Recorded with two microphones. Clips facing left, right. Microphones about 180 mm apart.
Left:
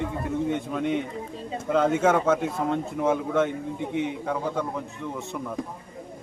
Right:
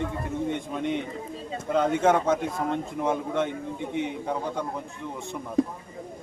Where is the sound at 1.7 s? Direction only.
5° left (ahead or behind).